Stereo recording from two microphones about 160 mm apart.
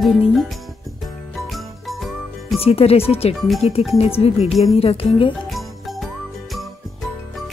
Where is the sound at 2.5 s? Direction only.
40° left (ahead or behind).